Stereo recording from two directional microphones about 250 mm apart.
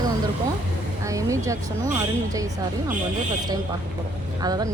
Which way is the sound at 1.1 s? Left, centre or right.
Centre.